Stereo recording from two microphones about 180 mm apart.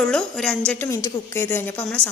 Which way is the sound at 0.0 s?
5° left (ahead or behind).